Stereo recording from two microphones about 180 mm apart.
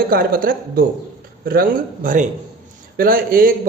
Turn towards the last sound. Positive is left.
turn(degrees=-55)  # may be behind; listen again after turning